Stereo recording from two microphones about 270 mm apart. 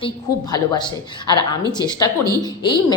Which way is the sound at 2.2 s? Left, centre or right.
Centre.